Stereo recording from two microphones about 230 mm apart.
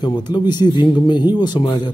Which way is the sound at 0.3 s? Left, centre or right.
Centre.